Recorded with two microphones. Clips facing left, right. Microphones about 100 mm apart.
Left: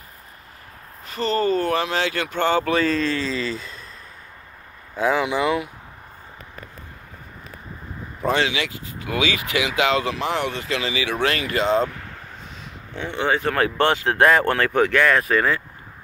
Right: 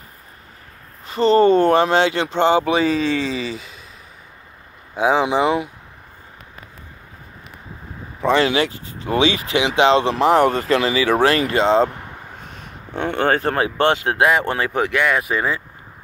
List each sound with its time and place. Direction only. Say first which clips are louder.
1.0 s speech: right 8 dB; 30° right (ahead or behind); by 3.1 s 15° right (ahead or behind)
3.5 s a sound: even; 10° right (ahead or behind)
4.9 s speech: right 4 dB; 20° right (ahead or behind)
8.3 s speech: right 5 dB; 40° right (ahead or behind); by 12.2 s 20° right (ahead or behind)
12.4 s a sound: right 2 dB; 55° right (ahead or behind)
13.6 s speech: right 2 dB; 20° right (ahead or behind)
14.1 s speech: even; 10° right (ahead or behind)
14.4 s speech: left 2 dB; 20° right (ahead or behind)